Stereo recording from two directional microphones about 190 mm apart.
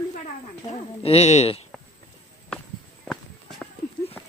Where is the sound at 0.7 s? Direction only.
35° left (ahead or behind).